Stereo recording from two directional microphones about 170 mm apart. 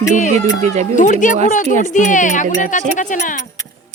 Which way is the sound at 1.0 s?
50° left (ahead or behind).